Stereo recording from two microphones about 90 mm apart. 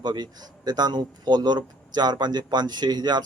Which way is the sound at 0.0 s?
55° right (ahead or behind).